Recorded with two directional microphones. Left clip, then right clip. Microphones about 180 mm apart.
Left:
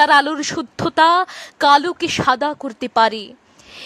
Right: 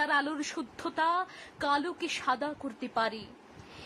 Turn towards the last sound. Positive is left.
turn(degrees=55)  # may be behind; listen again after turning